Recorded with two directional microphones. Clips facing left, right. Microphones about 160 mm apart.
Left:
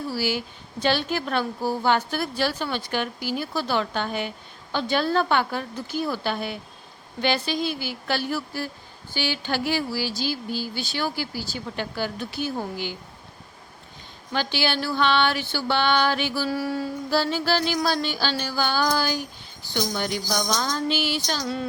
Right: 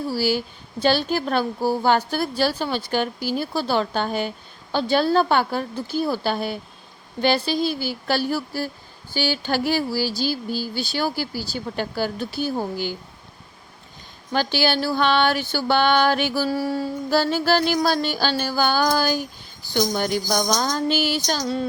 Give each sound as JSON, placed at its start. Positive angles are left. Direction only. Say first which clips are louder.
{"t": 0.1, "sound": "a woman's voice", "louder": "right 5 dB", "side_deg": -35}
{"t": 14.3, "sound": "music", "louder": "right 4 dB", "side_deg": -40}
{"t": 16.5, "sound": "mantra", "louder": "right 3 dB", "side_deg": -30}
{"t": 17.1, "sound": "music", "louder": "right 4 dB", "side_deg": -45}
{"t": 21.4, "sound": "mantra", "louder": "right 4 dB", "side_deg": -30}